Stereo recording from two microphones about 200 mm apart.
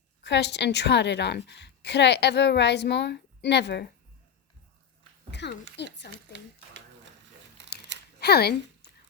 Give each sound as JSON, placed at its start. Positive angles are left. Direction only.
{"t": 0.2, "sound": "a woman's voice", "side_deg": 60}
{"t": 5.3, "sound": "a woman's voice", "side_deg": 60}
{"t": 6.3, "sound": "a sound", "side_deg": -65}
{"t": 8.2, "sound": "speech", "side_deg": 55}